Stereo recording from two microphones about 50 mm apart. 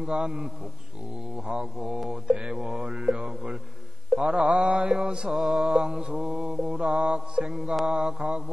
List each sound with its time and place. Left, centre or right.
0.1 s mantra: centre
1.8 s mantra: centre
5.3 s mantra: centre
5.7 s mantra: centre
7.5 s mantra: centre
7.8 s mantra: centre